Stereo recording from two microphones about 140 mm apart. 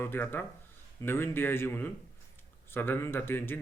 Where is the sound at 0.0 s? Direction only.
15° left (ahead or behind).